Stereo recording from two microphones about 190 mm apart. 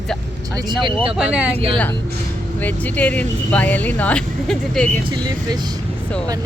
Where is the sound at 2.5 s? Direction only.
10° left (ahead or behind).